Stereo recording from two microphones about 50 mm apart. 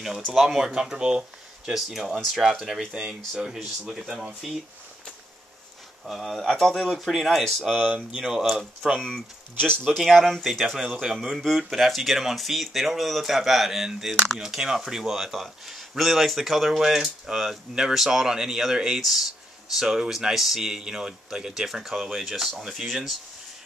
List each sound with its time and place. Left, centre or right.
0.3 s speech: centre
1.7 s speech: centre
2.9 s speech: centre
6.0 s speech: centre
7.7 s speech: right
8.2 s speech: centre
9.8 s speech: centre